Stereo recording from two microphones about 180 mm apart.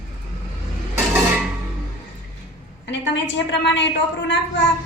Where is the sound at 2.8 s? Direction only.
75° left (ahead or behind).